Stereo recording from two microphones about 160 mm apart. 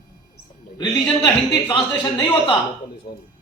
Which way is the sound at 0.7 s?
30° left (ahead or behind).